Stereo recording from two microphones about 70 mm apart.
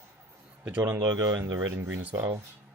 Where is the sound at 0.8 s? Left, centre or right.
Right.